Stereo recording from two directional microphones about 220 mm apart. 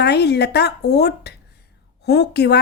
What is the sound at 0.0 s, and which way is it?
Speech, 50° left (ahead or behind).